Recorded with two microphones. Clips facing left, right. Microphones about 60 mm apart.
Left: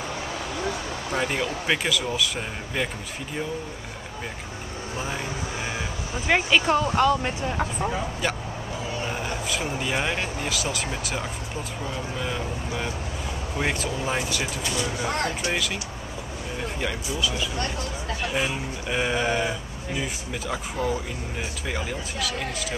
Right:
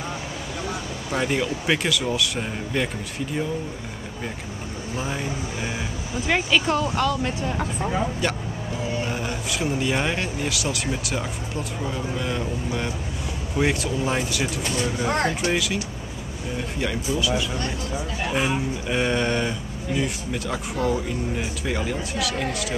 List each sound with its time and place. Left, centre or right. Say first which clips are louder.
1.1 s speech: right 3 dB; centre
4.9 s speech: right 2 dB; centre
6.2 s speech: left 1 dB; centre
7.4 s speech: even; centre
9.0 s speech: right 1 dB; centre
14.6 s speech: right 2 dB; right
15.5 s speech: right 3 dB; centre
16.8 s speech: right 4 dB; centre
18.9 s speech: right 1 dB; centre